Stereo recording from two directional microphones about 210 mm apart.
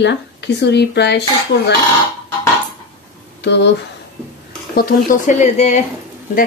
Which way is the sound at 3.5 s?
55° left (ahead or behind).